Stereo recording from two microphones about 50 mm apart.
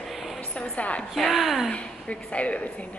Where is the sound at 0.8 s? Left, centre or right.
Left.